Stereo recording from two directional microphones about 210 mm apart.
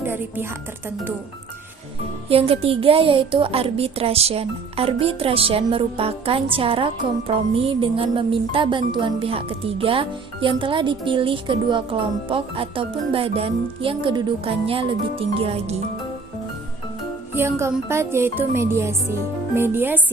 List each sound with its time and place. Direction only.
2.3 s a woman's voice: 30° right (ahead or behind)
17.3 s music: 10° right (ahead or behind)